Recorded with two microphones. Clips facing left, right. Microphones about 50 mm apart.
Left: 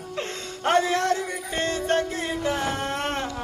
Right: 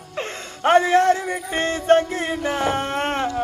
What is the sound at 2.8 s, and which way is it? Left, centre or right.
Dog, right.